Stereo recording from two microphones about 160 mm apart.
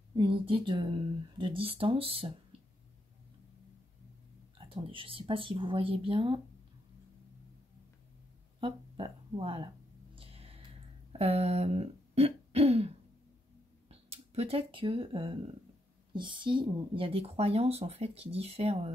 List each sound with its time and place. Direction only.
0.1 s speech: 30° right (ahead or behind)
4.6 s speech: 30° right (ahead or behind)
8.5 s speech: 30° right (ahead or behind)
10.1 s a sound: 35° right (ahead or behind)
11.1 s throat clearing: 40° right (ahead or behind)
13.8 s speech: 40° right (ahead or behind)